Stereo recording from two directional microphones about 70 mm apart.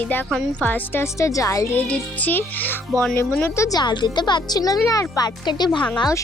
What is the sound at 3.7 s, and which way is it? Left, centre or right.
Speech, left.